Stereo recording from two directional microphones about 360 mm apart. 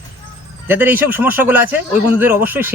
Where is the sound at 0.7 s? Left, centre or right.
Centre.